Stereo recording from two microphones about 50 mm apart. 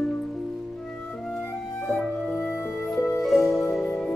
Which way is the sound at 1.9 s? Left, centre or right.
Left.